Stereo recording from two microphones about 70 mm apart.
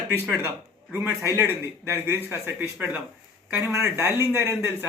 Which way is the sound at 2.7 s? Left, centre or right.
Right.